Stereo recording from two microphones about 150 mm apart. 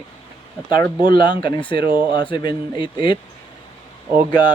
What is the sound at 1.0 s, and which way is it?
Speech, 30° left (ahead or behind).